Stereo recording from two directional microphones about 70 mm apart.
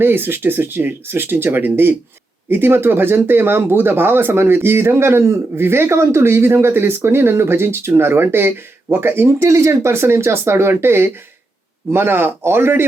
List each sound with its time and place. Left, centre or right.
0.0 s speech: right
9.4 s speech: right